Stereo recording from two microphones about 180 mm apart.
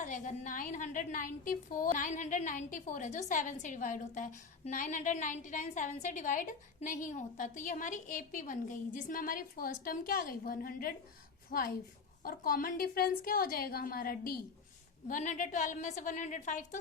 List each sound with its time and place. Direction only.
0.0 s a woman's voice: 45° left (ahead or behind)